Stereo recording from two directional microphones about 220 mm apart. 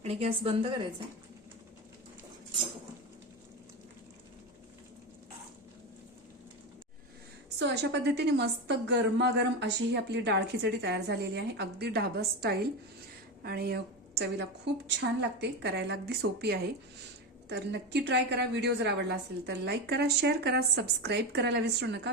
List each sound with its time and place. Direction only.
0.0 s a woman's voice: 25° right (ahead or behind)
7.6 s a woman's voice: 50° right (ahead or behind)